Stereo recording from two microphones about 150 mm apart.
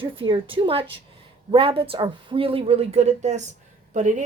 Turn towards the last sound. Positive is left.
turn(degrees=-55)  # may be behind; listen again after turning